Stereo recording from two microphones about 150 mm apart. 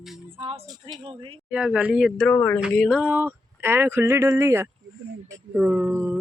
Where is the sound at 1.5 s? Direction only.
5° right (ahead or behind); by 2.6 s 10° left (ahead or behind).